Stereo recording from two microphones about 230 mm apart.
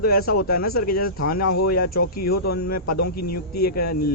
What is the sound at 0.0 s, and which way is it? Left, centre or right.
A man's voice, left.